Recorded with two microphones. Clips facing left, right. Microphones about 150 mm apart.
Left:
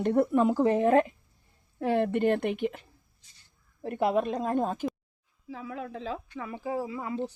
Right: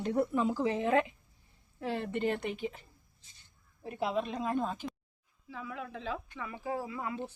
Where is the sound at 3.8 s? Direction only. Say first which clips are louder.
Left 7 dB; 60° left (ahead or behind).